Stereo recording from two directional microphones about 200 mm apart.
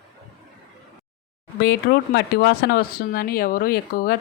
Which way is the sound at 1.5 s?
55° left (ahead or behind).